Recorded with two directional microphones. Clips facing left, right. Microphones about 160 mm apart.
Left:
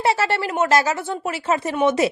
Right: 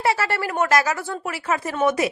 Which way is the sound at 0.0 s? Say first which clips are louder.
Left 2 dB; 25° left (ahead or behind).